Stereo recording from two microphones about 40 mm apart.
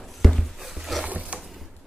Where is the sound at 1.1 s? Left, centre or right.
Right.